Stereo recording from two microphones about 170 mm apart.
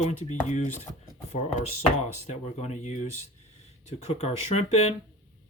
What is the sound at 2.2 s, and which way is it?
Speech, 40° left (ahead or behind).